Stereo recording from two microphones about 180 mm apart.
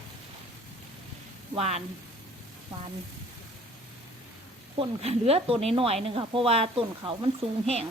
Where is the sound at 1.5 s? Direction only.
35° right (ahead or behind).